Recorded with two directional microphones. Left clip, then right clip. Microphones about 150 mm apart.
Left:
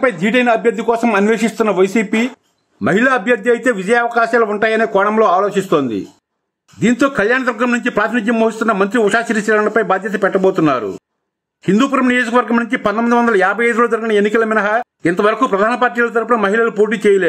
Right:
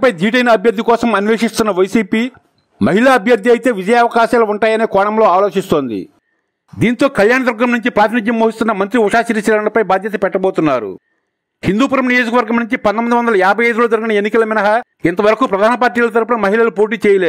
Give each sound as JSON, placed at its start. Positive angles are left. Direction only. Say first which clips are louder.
{"t": 0.0, "sound": "a man's voice", "louder": "right 2 dB", "side_deg": -60}
{"t": 6.8, "sound": "a man's voice", "louder": "right 2 dB", "side_deg": -40}